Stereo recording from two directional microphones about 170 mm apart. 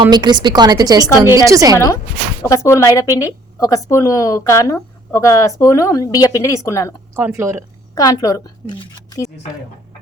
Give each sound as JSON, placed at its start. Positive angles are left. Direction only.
{"t": 0.0, "sound": "a woman's voice", "side_deg": -25}
{"t": 2.4, "sound": "a woman's voice", "side_deg": 20}
{"t": 7.2, "sound": "speech", "side_deg": -15}
{"t": 7.9, "sound": "a woman's voice", "side_deg": 20}